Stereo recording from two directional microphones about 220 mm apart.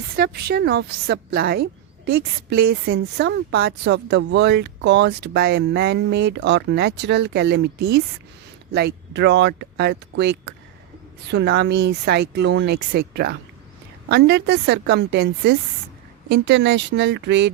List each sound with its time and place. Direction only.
0.2 s a woman's voice: 45° right (ahead or behind)